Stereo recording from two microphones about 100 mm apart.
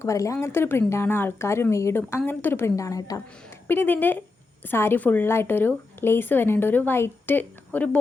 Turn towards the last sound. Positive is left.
turn(degrees=20)  # may be behind; listen again after turning